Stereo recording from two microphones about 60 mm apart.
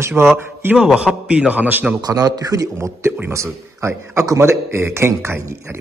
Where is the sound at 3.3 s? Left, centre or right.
Right.